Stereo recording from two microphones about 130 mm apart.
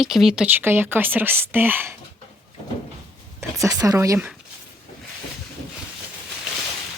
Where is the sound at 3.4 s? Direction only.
25° right (ahead or behind).